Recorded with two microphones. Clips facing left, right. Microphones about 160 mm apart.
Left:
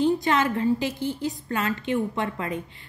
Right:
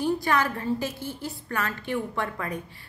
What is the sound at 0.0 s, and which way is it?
A woman's voice, 20° left (ahead or behind).